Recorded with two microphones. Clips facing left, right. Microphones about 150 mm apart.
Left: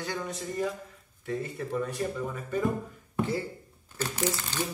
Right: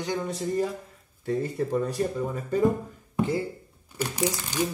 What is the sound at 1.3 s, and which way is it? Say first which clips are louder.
Speech: right 6 dB; 35° right (ahead or behind).